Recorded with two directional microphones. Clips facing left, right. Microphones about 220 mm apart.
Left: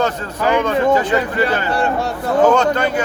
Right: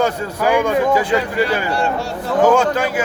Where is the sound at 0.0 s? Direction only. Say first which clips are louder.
Right 1 dB; 10° right (ahead or behind).